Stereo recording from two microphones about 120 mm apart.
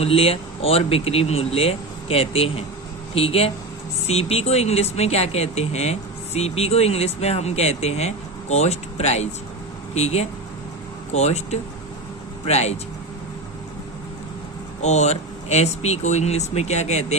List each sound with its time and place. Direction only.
0.0 s speech: 50° left (ahead or behind)
14.8 s speech: 70° left (ahead or behind)